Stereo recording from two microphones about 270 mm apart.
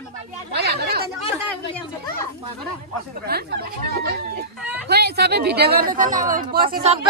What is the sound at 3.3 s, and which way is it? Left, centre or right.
Speech, right.